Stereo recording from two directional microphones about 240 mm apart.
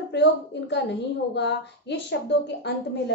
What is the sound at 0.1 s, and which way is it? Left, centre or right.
A woman's voice, left.